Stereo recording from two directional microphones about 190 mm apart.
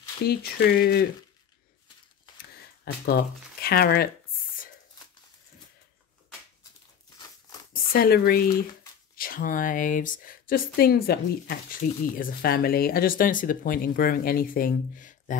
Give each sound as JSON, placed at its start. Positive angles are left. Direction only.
{"t": 0.3, "sound": "speech", "side_deg": 55}
{"t": 2.8, "sound": "speech", "side_deg": 55}
{"t": 7.7, "sound": "speech", "side_deg": 50}